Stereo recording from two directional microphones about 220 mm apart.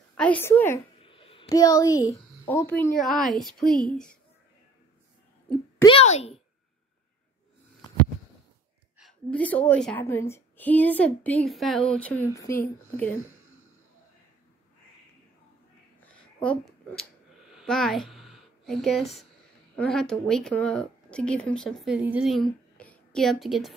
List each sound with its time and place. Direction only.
0.2 s a woman's voice: 10° left (ahead or behind)
1.0 s a sound: 25° left (ahead or behind)
1.5 s a woman's voice: 15° left (ahead or behind)
5.9 s a child's voice: 30° left (ahead or behind)
8.9 s a woman's voice: centre (ahead or behind)
16.0 s a sound: 5° left (ahead or behind)
19.7 s speech: 5° left (ahead or behind)